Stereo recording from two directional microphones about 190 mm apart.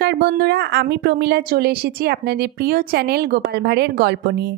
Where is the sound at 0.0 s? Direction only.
60° right (ahead or behind).